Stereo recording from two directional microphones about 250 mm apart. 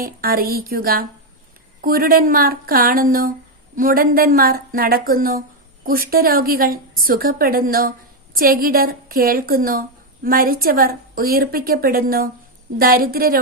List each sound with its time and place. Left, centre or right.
0.0 s a woman's voice: right